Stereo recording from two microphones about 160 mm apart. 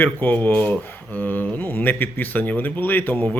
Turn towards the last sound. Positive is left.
turn(degrees=10)  # may be behind; listen again after turning